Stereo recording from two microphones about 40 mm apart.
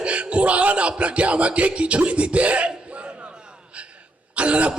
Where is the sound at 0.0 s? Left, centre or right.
Right.